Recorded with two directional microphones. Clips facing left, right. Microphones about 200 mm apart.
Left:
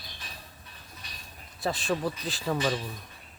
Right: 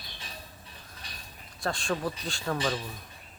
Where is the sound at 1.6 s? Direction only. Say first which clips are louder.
Left 2 dB; 5° left (ahead or behind).